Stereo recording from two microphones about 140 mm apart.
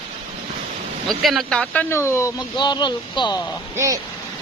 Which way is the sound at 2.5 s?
30° left (ahead or behind).